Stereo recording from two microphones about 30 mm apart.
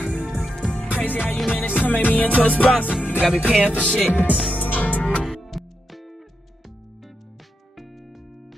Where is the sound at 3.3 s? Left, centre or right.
Right.